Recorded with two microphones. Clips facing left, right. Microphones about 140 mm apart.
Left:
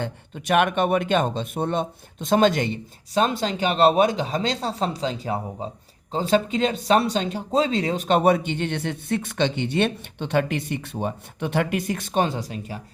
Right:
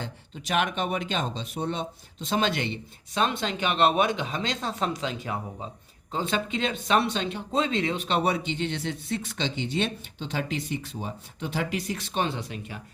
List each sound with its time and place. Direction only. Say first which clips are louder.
0.0 s speech: left 7 dB; 60° left (ahead or behind); by 12.8 s 35° left (ahead or behind)